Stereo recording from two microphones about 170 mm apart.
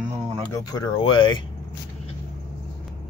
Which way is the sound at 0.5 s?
25° left (ahead or behind).